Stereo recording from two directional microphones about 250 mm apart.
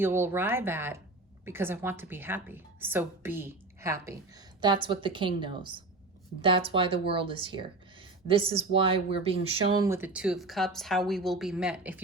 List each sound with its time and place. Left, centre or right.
0.0 s a woman's voice: centre